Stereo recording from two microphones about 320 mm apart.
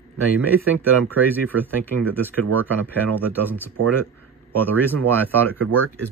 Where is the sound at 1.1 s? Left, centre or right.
Centre.